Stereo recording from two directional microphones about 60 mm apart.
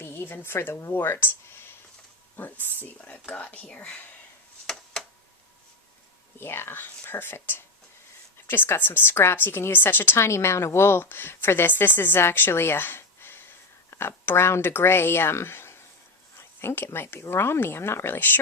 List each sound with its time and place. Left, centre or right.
0.0 s a woman's voice: left
0.8 s a sound: left
2.3 s speech: left; by 4.0 s centre
4.6 s a sound: centre
6.4 s a woman's voice: left
9.7 s a woman's voice: left
10.2 s a woman's voice: left